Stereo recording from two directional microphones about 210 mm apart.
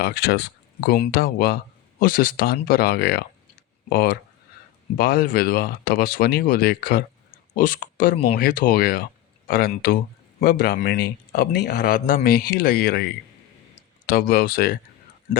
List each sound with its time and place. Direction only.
0.0 s speech: 50° left (ahead or behind)